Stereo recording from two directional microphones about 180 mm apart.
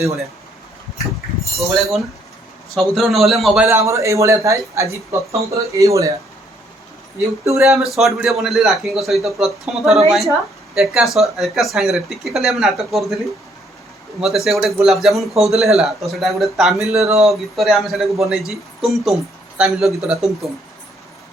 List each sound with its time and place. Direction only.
1.5 s speech: centre (ahead or behind)
3.8 s speech: 15° right (ahead or behind)
7.4 s speech: 15° right (ahead or behind)
7.8 s speech: centre (ahead or behind)
14.2 s speech: centre (ahead or behind)